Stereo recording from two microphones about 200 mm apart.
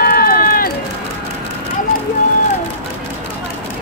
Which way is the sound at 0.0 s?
45° left (ahead or behind).